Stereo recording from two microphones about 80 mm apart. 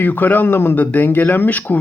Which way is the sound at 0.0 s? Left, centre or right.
Left.